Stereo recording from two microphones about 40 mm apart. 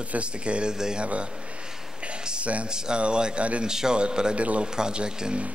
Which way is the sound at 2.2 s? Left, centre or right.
Right.